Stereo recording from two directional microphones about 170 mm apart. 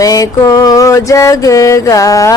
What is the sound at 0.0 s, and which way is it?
Mantra, 20° left (ahead or behind).